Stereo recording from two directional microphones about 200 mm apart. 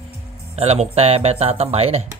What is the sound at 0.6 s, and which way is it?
Speech, 30° right (ahead or behind).